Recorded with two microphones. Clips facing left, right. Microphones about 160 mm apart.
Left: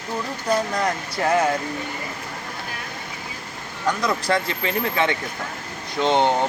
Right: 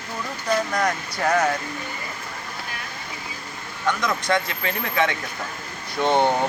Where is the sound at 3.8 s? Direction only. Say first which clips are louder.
Left 1 dB; 35° left (ahead or behind).